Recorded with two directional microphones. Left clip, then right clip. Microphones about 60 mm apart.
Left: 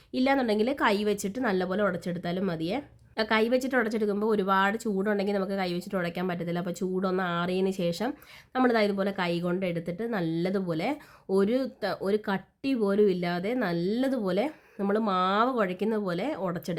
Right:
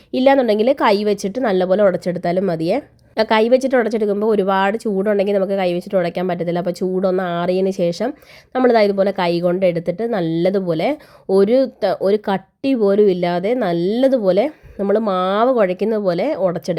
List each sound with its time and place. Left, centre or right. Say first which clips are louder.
0.1 s a woman's voice: right 12 dB; right
1.7 s speech: right 14 dB; right
3.2 s a woman's voice: right 10 dB; right
3.5 s a woman's voice: right 12 dB; right